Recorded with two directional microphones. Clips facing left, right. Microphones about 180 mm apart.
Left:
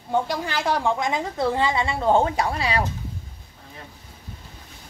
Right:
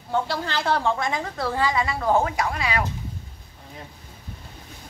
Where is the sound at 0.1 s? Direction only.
15° left (ahead or behind); by 2.8 s 30° left (ahead or behind).